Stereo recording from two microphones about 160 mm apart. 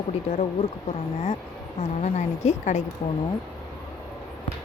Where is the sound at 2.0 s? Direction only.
45° left (ahead or behind).